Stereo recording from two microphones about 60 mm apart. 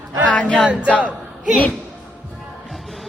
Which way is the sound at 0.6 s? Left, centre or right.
Centre.